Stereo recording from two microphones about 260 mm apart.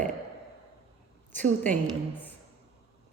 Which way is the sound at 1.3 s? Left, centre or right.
Right.